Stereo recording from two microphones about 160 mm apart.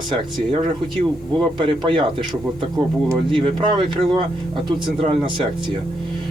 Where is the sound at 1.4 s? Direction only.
30° right (ahead or behind).